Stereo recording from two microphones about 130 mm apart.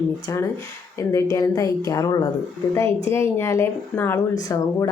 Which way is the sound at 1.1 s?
25° left (ahead or behind).